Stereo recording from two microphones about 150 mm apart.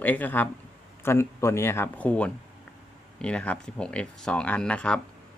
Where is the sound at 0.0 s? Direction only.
10° left (ahead or behind).